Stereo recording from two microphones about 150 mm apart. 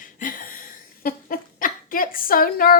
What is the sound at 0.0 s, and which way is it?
Dog, 65° left (ahead or behind).